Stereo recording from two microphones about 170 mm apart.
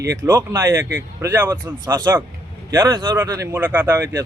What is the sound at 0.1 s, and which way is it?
Speech, 15° right (ahead or behind).